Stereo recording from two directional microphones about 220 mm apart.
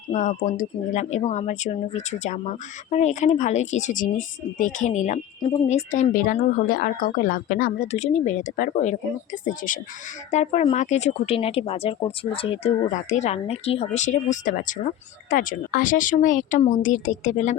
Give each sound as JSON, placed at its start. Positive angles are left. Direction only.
{"t": 0.1, "sound": "speech", "side_deg": 35}